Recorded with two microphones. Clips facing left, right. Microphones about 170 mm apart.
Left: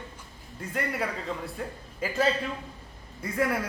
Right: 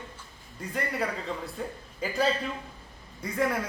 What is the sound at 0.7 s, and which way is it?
A man's voice, centre (ahead or behind).